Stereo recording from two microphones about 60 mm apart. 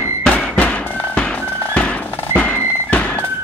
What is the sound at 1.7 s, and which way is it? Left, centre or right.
Music, left.